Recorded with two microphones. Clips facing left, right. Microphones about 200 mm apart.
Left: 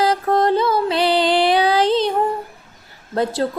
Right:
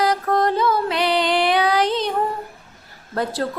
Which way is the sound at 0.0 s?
30° left (ahead or behind).